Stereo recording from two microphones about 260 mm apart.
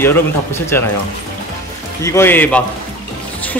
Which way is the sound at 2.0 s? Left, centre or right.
Centre.